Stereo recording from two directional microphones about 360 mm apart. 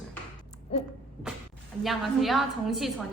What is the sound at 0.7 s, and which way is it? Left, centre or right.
Owl, centre.